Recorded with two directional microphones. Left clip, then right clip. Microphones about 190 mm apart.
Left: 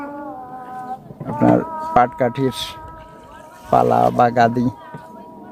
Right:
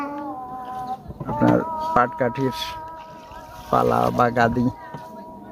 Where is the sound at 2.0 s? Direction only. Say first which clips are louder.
Left 4 dB; 15° left (ahead or behind).